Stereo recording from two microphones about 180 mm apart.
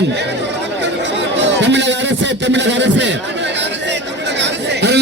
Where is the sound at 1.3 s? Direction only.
85° right.